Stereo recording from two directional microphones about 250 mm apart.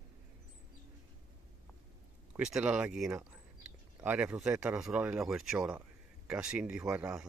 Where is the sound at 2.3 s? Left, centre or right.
Centre.